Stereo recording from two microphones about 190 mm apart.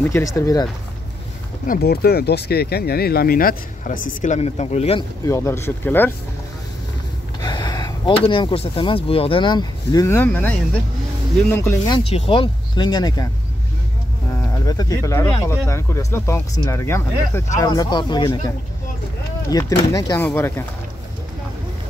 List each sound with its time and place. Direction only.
0.0 s speech: 15° left (ahead or behind)
1.7 s speech: 55° left (ahead or behind)
4.2 s speech: 35° left (ahead or behind)
5.2 s speech: 15° left (ahead or behind)
7.4 s gasp: 20° left (ahead or behind)
8.2 s speech: 25° left (ahead or behind); by 10.5 s 10° left (ahead or behind)
11.5 s speech: 15° left (ahead or behind)
14.7 s speech: 20° left (ahead or behind)
19.5 s speech: 20° left (ahead or behind)